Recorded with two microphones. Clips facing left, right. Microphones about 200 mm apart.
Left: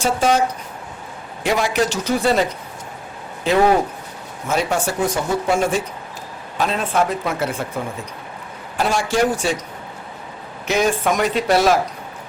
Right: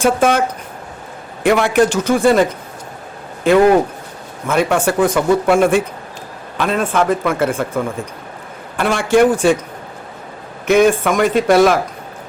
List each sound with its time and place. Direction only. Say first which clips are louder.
0.0 s speech: right 4 dB; 55° right (ahead or behind)
1.5 s speech: right 6 dB; 55° right (ahead or behind)
10.7 s speech: right 6 dB; 55° right (ahead or behind)